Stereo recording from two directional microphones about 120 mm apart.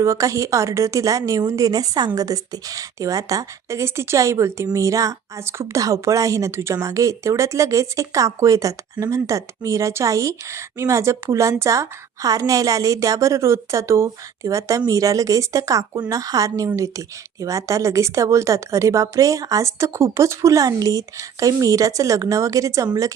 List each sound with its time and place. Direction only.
0.0 s a woman's voice: 25° right (ahead or behind)